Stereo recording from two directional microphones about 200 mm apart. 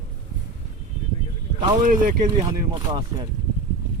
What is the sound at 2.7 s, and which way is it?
Speech, 20° right (ahead or behind).